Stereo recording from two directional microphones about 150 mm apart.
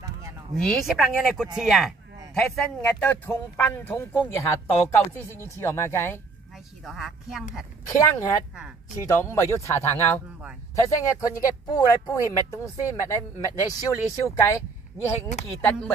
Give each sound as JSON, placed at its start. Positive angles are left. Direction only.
{"t": 0.6, "sound": "speech", "side_deg": 0}
{"t": 6.8, "sound": "speech", "side_deg": 0}
{"t": 7.8, "sound": "speech", "side_deg": 25}